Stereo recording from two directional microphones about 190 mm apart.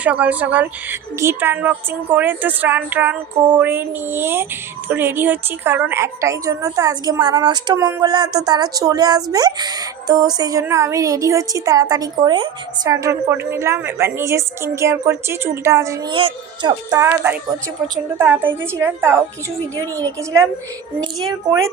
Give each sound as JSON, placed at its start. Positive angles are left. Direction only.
{"t": 0.0, "sound": "a woman's voice", "side_deg": -10}